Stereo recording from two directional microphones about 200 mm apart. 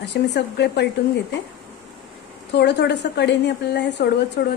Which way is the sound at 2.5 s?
55° left (ahead or behind).